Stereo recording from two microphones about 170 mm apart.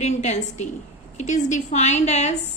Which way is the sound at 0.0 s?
40° left (ahead or behind).